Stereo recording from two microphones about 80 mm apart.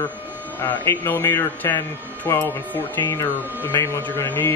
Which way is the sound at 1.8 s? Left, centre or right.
Left.